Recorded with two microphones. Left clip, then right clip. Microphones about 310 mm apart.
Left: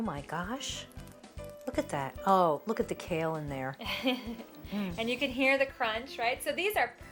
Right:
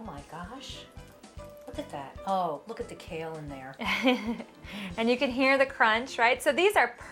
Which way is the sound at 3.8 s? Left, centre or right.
Right.